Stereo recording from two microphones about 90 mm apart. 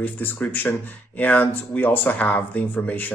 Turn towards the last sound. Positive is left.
turn(degrees=20)  # may be behind; listen again after turning